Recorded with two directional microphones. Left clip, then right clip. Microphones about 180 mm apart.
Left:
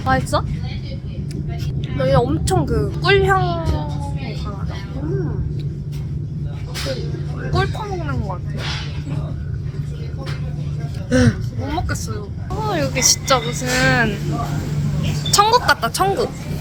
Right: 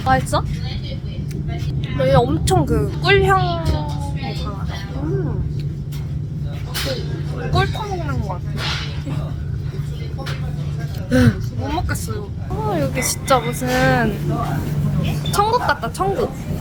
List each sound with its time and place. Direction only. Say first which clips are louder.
0.0 s speech: right 1 dB; 10° left (ahead or behind)
2.0 s speech: right 1 dB; 5° left (ahead or behind)
3.0 s speech: even; 15° left (ahead or behind)
7.5 s speech: right 1 dB; 15° left (ahead or behind)
11.1 s a woman's voice: even; 5° left (ahead or behind)
15.3 s speech: left 3 dB; centre (ahead or behind)